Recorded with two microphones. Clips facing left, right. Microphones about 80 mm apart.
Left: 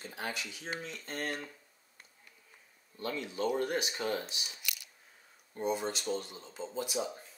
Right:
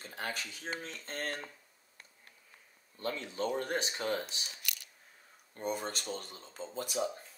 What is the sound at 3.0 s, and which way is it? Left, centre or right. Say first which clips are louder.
Speech: left 1 dB; right.